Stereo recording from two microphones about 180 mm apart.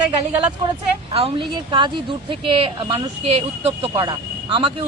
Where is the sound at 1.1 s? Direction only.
30° right (ahead or behind).